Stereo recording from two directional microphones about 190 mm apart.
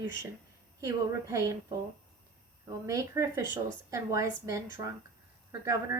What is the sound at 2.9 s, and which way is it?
Speech, 15° right (ahead or behind).